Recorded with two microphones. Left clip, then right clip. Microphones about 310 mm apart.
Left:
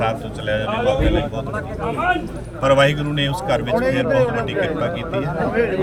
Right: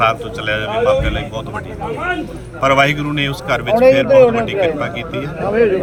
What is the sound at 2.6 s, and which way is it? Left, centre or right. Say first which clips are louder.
Speech: right 2 dB; centre.